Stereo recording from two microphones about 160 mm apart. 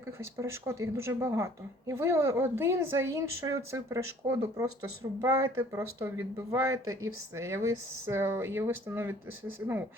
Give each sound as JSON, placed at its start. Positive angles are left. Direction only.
{"t": 0.2, "sound": "a woman's voice", "side_deg": -15}